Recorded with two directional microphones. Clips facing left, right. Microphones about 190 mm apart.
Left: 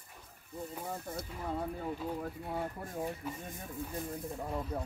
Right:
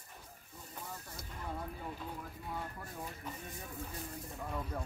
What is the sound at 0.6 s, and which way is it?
Hiss, 55° left (ahead or behind).